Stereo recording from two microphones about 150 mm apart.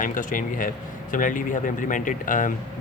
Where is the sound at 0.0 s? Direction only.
60° left (ahead or behind).